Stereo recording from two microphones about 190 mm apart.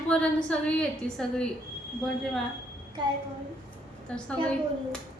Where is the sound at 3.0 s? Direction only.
25° right (ahead or behind).